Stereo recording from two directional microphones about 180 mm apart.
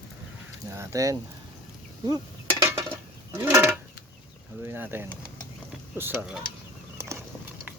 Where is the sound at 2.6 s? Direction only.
15° right (ahead or behind).